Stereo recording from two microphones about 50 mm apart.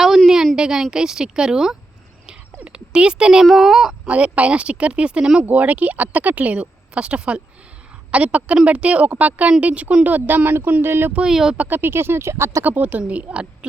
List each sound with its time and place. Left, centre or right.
0.5 s a woman's voice: centre
3.4 s speech: centre
4.0 s speech: right
5.5 s a woman's voice: right
10.8 s speech: right
11.2 s a woman's voice: centre
11.7 s speech: right
12.6 s a woman's voice: right
13.0 s speech: right